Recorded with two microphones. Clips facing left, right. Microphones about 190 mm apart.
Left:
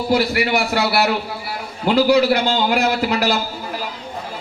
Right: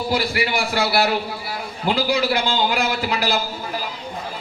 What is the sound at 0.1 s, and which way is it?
A man's voice, 60° left (ahead or behind).